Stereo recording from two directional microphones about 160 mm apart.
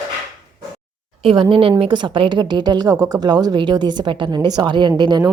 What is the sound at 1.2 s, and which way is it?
A woman's voice, 35° right (ahead or behind).